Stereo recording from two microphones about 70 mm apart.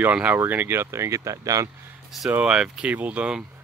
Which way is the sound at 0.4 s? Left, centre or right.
Right.